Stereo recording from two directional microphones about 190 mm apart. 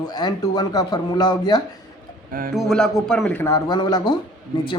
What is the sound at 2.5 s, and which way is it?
Speech, centre (ahead or behind).